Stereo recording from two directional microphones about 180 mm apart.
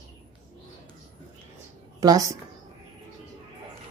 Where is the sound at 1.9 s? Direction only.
20° right (ahead or behind).